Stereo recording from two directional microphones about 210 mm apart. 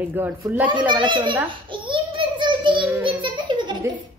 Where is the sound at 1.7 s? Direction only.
25° right (ahead or behind).